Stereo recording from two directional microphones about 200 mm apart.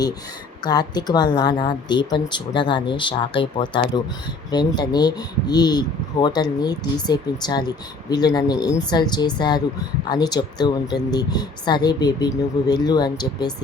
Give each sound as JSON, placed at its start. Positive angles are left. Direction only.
{"t": 0.6, "sound": "speech", "side_deg": 20}